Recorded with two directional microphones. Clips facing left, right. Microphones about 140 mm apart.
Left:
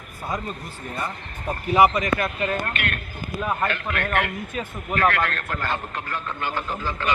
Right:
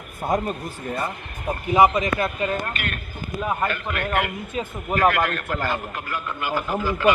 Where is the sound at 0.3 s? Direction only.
50° right (ahead or behind).